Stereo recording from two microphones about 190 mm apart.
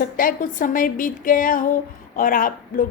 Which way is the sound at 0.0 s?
45° left (ahead or behind).